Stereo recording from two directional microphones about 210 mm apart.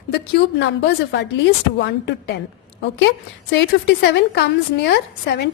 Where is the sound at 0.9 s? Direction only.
55° left (ahead or behind).